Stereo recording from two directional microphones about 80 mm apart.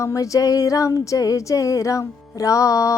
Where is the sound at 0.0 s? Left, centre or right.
Left.